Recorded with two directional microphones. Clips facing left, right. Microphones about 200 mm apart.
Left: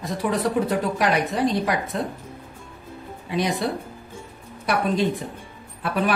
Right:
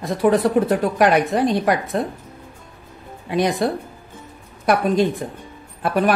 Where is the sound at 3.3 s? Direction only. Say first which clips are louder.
Right 5 dB; 50° right (ahead or behind).